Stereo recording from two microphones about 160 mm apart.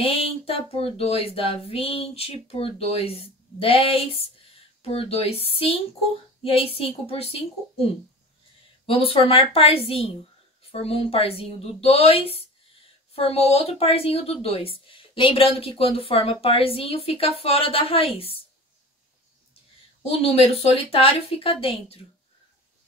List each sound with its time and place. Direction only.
0.0 s speech: 35° left (ahead or behind)
20.1 s speech: 35° left (ahead or behind)